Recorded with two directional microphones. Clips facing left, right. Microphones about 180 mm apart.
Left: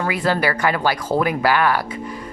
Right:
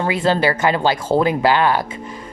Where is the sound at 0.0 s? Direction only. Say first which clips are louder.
Right 3 dB; 25° right (ahead or behind).